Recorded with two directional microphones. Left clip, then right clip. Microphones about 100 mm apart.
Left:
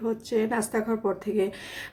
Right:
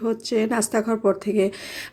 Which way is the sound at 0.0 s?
30° right (ahead or behind).